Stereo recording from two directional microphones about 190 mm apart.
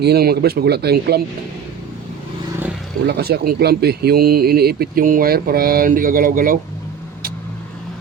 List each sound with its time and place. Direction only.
0.0 s speech: 55° right (ahead or behind)
3.1 s speech: 55° right (ahead or behind)